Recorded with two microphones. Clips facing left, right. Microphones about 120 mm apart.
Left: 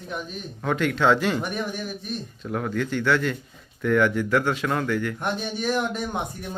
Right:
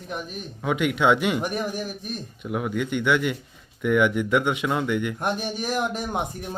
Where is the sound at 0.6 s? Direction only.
10° right (ahead or behind).